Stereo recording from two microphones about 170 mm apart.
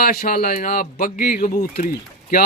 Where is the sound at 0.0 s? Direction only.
60° left (ahead or behind).